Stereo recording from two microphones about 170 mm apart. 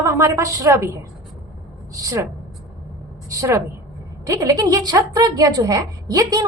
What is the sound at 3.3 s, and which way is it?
A woman's voice, 20° right (ahead or behind).